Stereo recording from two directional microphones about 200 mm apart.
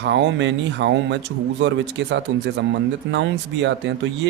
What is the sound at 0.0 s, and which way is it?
Speech, 65° right (ahead or behind).